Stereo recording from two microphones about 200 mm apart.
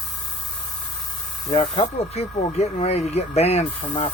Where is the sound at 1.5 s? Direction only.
30° left (ahead or behind).